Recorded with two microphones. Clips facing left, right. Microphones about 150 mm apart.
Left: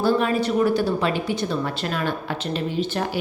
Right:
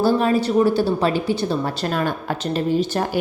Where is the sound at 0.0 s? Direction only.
35° right (ahead or behind).